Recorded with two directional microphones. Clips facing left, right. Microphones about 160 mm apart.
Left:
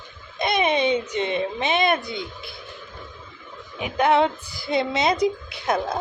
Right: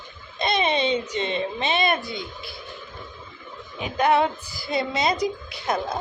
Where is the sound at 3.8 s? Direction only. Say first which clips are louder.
Left 1 dB; 20° left (ahead or behind).